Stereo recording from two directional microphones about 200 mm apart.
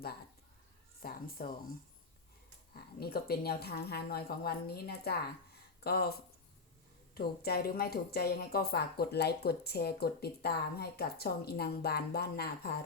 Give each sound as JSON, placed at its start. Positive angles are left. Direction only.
{"t": 1.0, "sound": "a woman's voice", "side_deg": 45}
{"t": 2.7, "sound": "a woman's voice", "side_deg": 50}